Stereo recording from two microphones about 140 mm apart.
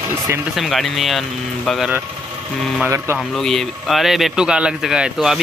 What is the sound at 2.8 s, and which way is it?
Speech, 20° right (ahead or behind).